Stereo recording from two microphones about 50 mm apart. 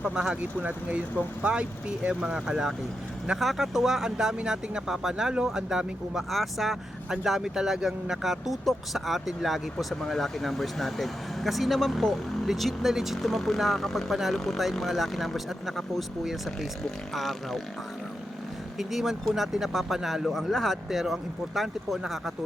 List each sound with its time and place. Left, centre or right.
0.0 s speech: centre
0.6 s speech: right; by 6.2 s centre
6.3 s speech: centre
9.7 s speech: centre
18.8 s speech: centre